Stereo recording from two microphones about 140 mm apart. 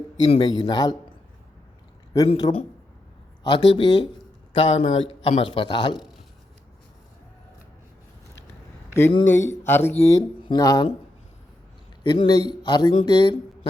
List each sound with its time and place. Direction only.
0.4 s a man's voice: 30° left (ahead or behind)
2.4 s a man's voice: 40° left (ahead or behind)
8.9 s a man's voice: 15° left (ahead or behind)
12.0 s a man's voice: 30° left (ahead or behind)